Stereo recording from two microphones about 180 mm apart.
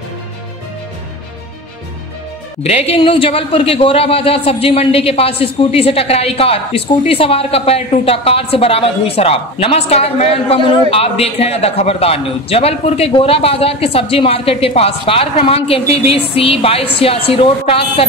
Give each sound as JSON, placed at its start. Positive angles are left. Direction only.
{"t": 2.6, "sound": "a man's voice", "side_deg": 35}